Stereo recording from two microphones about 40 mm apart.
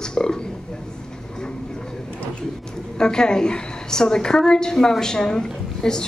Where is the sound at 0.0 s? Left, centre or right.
Centre.